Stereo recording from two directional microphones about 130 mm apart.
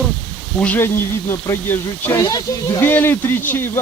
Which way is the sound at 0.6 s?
15° left (ahead or behind).